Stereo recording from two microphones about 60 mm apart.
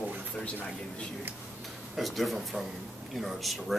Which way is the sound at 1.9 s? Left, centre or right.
Centre.